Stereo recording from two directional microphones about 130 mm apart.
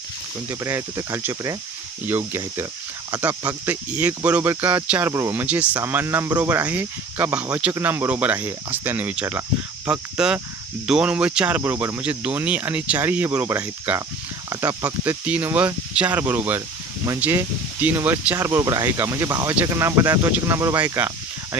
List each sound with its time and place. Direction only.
0.6 s speech: 20° right (ahead or behind)
14.5 s speech: 25° right (ahead or behind)
15.0 s speech: 15° right (ahead or behind)